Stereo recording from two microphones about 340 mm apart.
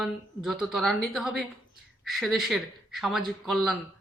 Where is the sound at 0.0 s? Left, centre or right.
Centre.